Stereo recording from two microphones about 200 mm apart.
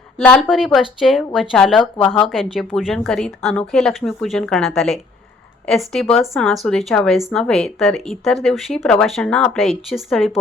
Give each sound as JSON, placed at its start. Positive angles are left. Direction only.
{"t": 0.3, "sound": "speech", "side_deg": 0}